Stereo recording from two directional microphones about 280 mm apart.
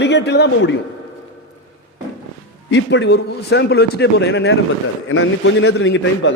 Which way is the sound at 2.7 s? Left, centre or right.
Left.